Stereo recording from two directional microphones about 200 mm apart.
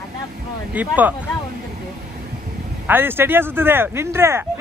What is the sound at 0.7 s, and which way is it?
Speech, 10° right (ahead or behind).